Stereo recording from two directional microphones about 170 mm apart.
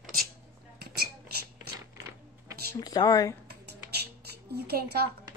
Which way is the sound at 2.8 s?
25° left (ahead or behind).